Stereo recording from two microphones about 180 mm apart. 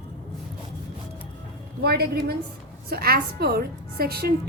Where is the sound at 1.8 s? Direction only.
60° right (ahead or behind).